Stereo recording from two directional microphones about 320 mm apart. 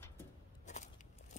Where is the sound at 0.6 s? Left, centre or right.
Left.